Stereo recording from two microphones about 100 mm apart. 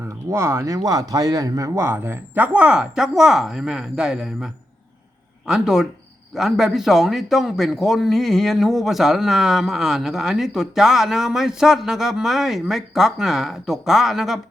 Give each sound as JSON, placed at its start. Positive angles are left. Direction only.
{"t": 0.3, "sound": "speech", "side_deg": -30}